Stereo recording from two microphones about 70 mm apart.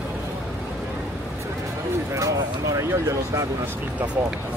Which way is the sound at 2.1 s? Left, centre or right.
Right.